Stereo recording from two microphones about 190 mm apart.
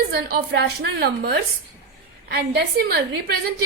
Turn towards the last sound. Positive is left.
turn(degrees=-55)  # may be behind; listen again after turning